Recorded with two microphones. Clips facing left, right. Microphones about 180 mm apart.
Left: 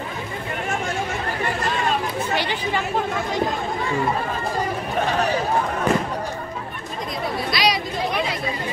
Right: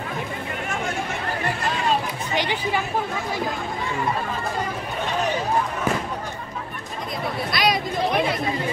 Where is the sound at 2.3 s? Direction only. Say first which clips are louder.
Right 2 dB; 15° right (ahead or behind).